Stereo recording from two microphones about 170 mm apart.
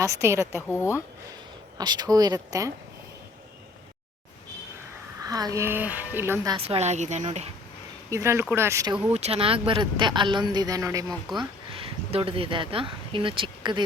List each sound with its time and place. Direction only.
0.0 s speech: 15° right (ahead or behind)
0.7 s speech: 15° left (ahead or behind)
1.8 s speech: 25° right (ahead or behind)
5.2 s speech: 20° right (ahead or behind)
6.6 s a woman's voice: 35° right (ahead or behind)
8.1 s speech: 15° right (ahead or behind)
9.1 s speech: 40° right (ahead or behind); by 11.0 s 20° right (ahead or behind)
11.7 s speech: 35° right (ahead or behind)